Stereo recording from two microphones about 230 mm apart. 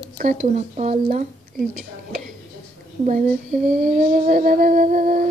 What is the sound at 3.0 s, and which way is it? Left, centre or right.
Female singing, right.